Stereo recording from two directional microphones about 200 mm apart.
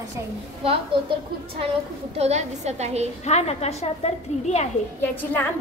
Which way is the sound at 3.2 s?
35° left (ahead or behind).